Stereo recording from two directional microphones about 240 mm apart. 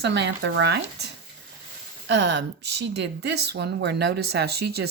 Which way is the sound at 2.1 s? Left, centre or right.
Right.